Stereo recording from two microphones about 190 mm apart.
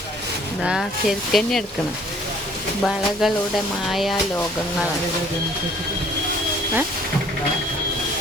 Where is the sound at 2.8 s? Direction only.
Centre (ahead or behind).